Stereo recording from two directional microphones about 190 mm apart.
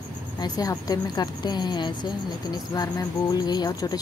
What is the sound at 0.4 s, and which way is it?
A woman's voice, 20° left (ahead or behind).